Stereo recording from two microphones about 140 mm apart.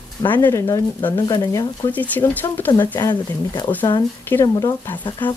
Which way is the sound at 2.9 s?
30° left (ahead or behind).